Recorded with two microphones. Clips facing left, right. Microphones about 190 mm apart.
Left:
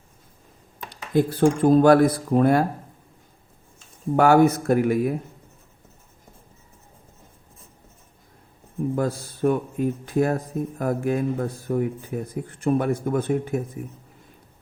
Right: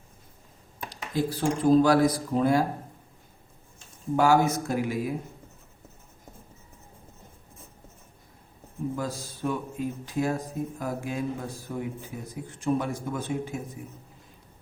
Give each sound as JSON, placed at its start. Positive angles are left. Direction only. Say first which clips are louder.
{"t": 0.9, "sound": "speech", "louder": "left 7 dB", "side_deg": 55}
{"t": 4.2, "sound": "speech", "louder": "left 6 dB", "side_deg": 60}
{"t": 9.0, "sound": "speech", "louder": "left 8 dB", "side_deg": 55}